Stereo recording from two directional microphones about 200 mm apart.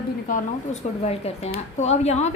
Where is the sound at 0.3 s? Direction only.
35° left (ahead or behind).